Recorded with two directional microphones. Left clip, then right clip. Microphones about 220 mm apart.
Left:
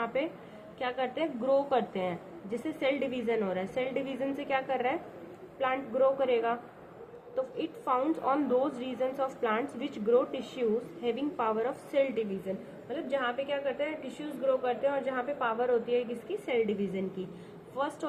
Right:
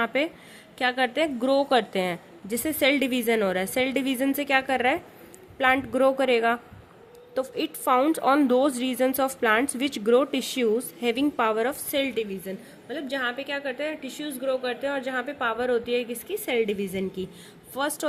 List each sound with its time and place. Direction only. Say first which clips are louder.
0.0 s a woman's voice: right 7 dB; 65° right (ahead or behind)